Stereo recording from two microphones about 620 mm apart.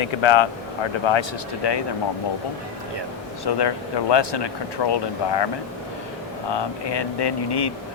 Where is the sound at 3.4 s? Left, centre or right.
Left.